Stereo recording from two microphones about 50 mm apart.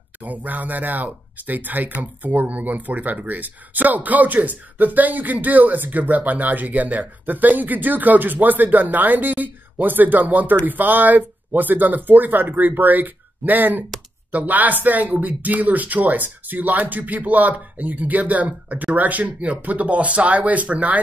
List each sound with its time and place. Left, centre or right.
0.2 s speech: right